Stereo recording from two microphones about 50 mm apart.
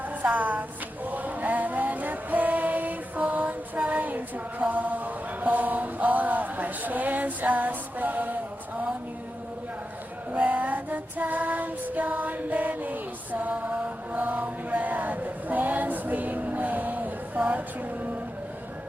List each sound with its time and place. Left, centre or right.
0.2 s a woman's voice: right
1.0 s a sound: right
10.4 s female singing: right